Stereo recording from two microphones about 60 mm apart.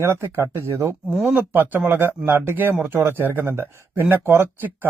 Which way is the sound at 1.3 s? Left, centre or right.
Right.